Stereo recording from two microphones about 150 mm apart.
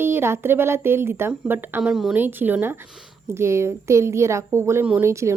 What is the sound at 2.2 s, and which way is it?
A woman's voice, 15° right (ahead or behind).